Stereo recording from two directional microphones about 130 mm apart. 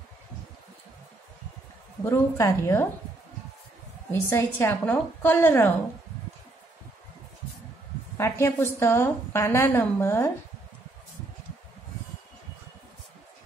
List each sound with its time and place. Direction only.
2.0 s a woman's voice: 25° left (ahead or behind)
4.1 s a woman's voice: 20° left (ahead or behind)
8.2 s a woman's voice: 20° left (ahead or behind)